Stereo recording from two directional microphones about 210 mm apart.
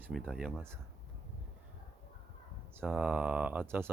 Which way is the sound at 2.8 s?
Centre (ahead or behind).